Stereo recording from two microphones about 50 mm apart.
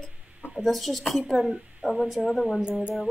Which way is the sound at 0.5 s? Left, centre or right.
Centre.